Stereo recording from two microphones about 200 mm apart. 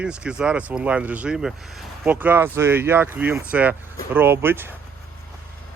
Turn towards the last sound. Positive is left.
turn(degrees=-10)  # may be behind; listen again after turning